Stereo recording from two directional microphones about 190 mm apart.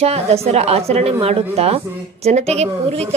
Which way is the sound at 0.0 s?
35° right (ahead or behind).